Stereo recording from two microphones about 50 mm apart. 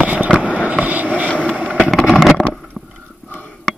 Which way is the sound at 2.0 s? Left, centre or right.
Centre.